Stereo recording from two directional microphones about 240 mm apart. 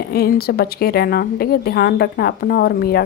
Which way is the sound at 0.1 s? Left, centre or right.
Left.